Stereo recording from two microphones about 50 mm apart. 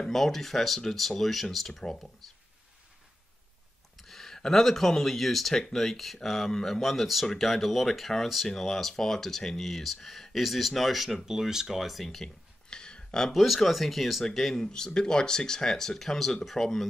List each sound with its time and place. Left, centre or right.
0.0 s speech: centre
4.0 s speech: centre
12.6 s a sound: centre
13.3 s speech: centre